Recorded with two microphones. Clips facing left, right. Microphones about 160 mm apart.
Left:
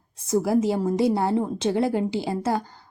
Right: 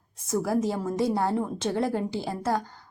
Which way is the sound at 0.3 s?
15° left (ahead or behind).